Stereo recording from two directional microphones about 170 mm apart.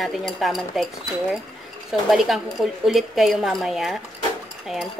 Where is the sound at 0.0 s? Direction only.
Centre (ahead or behind).